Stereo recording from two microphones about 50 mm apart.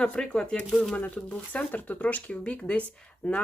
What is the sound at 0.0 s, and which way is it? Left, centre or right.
Speech, centre.